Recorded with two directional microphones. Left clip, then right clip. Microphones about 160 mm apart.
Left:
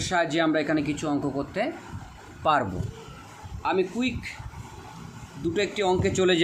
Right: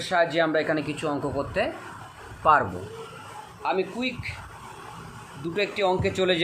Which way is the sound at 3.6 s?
35° left (ahead or behind).